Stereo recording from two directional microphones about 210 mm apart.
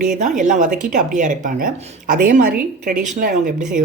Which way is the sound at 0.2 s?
35° right (ahead or behind).